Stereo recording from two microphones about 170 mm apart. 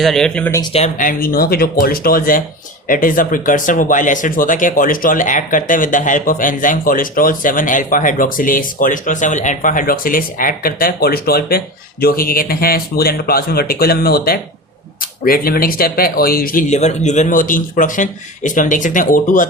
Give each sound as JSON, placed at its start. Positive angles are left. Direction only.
{"t": 0.0, "sound": "speech", "side_deg": 0}
{"t": 0.7, "sound": "speech", "side_deg": 45}